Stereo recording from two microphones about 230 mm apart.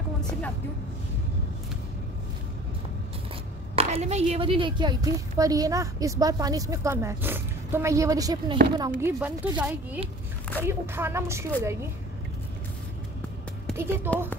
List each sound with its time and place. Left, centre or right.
3.7 s a woman's voice: right; by 11.4 s centre
13.7 s a woman's voice: centre